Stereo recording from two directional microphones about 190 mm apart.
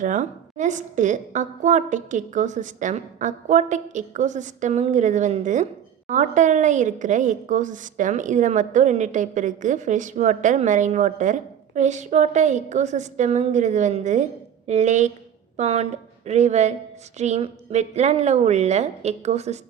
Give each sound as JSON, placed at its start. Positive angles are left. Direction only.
{"t": 0.0, "sound": "a woman's voice", "side_deg": -40}